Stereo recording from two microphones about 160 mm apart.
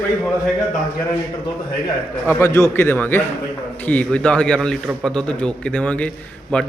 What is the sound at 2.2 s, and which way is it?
A man's voice, 15° left (ahead or behind).